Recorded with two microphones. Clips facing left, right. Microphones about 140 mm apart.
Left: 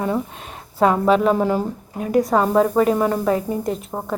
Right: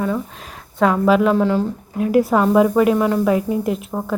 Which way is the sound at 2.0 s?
5° right (ahead or behind).